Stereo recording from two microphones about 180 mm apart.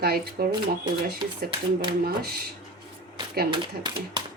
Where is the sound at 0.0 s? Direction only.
60° right (ahead or behind).